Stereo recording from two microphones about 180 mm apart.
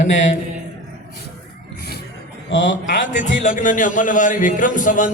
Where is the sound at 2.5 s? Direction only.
90° left.